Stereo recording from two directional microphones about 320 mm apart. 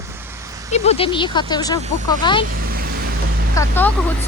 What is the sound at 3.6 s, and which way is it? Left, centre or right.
Speech, centre.